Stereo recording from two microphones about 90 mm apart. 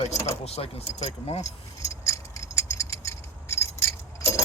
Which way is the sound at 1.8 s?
35° left (ahead or behind).